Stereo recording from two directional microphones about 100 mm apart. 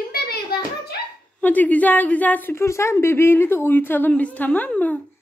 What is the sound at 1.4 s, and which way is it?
A woman's voice, 15° left (ahead or behind).